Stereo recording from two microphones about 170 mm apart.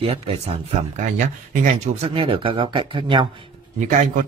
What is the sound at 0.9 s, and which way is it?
Speech, 50° right (ahead or behind).